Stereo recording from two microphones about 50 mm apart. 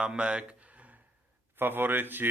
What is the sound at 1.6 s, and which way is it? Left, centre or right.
Speech, right.